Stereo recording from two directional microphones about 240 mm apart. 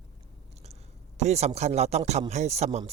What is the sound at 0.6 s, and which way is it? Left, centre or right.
A man's voice, right.